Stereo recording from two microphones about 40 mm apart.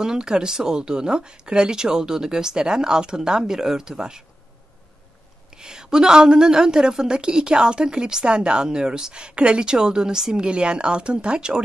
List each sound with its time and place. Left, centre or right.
0.0 s speech: centre
5.5 s a woman's voice: centre